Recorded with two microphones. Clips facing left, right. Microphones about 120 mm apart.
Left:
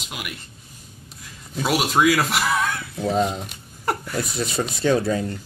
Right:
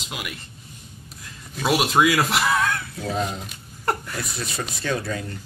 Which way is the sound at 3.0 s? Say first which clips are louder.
Left 6 dB; 20° left (ahead or behind).